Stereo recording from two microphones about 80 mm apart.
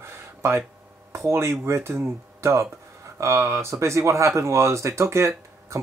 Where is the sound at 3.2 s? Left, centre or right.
Right.